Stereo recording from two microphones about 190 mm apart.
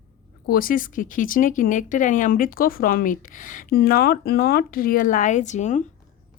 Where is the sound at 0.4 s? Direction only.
50° left (ahead or behind).